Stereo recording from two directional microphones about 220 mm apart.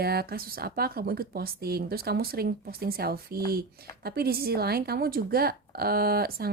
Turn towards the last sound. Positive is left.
turn(degrees=-45)  # may be behind; listen again after turning